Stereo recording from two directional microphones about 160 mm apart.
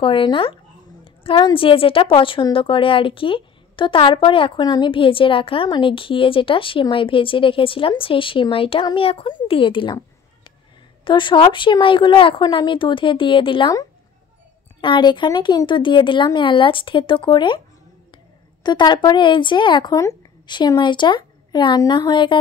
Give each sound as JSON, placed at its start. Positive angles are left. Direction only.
{"t": 0.0, "sound": "a woman's voice", "side_deg": 30}
{"t": 11.1, "sound": "a woman's voice", "side_deg": 30}
{"t": 14.8, "sound": "a woman's voice", "side_deg": 30}
{"t": 18.6, "sound": "speech", "side_deg": 25}